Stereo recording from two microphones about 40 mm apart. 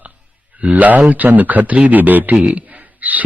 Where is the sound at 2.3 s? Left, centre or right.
Right.